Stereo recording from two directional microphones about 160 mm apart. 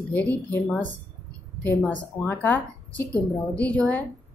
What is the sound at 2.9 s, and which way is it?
Speech, 20° right (ahead or behind).